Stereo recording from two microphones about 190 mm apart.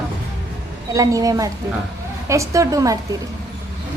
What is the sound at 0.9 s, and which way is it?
A woman's voice, 20° right (ahead or behind).